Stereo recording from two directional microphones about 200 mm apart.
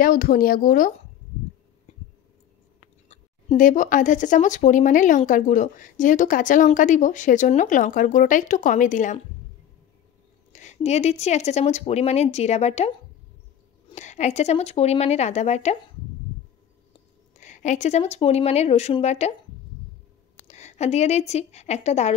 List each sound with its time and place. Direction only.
0.0 s speech: 45° left (ahead or behind)
3.1 s speech: 35° left (ahead or behind)
10.5 s speech: 35° left (ahead or behind)
13.9 s speech: 35° left (ahead or behind)
17.4 s speech: 35° left (ahead or behind)
20.3 s a woman's voice: 35° left (ahead or behind)